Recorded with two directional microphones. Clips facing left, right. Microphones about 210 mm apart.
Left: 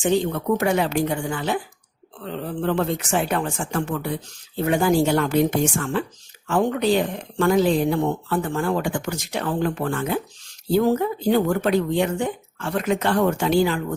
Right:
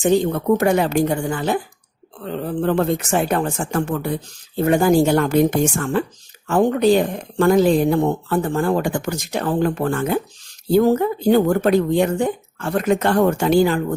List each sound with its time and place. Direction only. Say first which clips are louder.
0.0 s speech: right 4 dB; 40° right (ahead or behind)